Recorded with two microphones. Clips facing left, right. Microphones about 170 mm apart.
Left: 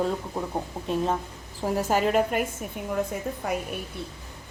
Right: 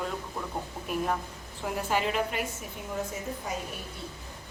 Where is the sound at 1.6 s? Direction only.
40° left (ahead or behind).